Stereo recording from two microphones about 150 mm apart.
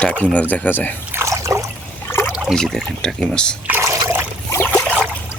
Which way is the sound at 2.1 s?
15° left (ahead or behind).